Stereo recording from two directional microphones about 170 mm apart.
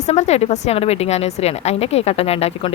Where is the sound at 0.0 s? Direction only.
40° left (ahead or behind).